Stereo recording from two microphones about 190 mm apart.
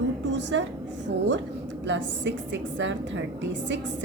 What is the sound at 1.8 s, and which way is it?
A woman's voice, 75° right (ahead or behind).